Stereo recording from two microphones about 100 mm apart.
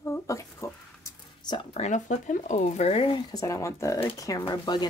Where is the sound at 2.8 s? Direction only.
80° left.